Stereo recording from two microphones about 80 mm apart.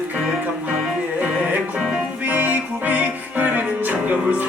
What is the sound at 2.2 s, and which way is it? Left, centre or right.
Music, right.